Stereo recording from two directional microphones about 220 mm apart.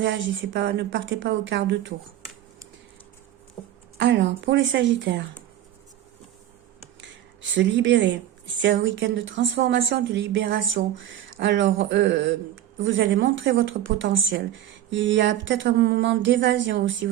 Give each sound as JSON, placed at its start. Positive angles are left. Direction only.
{"t": 0.0, "sound": "speech", "side_deg": -55}
{"t": 3.9, "sound": "speech", "side_deg": -55}
{"t": 7.5, "sound": "speech", "side_deg": -55}